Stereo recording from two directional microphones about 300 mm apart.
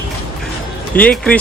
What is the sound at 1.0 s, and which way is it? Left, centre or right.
Speech, centre.